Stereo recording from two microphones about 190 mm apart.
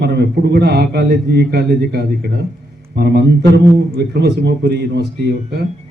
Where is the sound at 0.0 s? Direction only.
60° right (ahead or behind).